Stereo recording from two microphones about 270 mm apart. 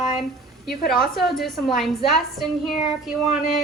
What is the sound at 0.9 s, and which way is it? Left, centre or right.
A woman's voice, centre.